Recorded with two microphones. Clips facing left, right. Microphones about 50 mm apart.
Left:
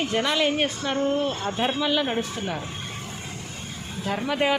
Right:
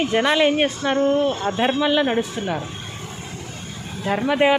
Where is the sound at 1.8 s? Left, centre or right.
Right.